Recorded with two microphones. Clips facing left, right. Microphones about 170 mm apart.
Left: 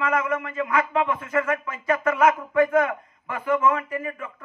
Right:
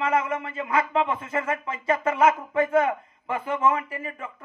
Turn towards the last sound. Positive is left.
turn(degrees=-25)  # may be behind; listen again after turning